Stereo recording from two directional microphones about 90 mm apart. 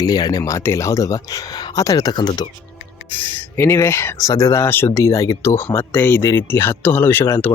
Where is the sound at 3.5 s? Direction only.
30° left (ahead or behind).